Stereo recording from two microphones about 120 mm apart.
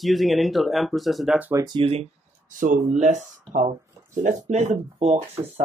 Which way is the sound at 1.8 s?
55° right (ahead or behind).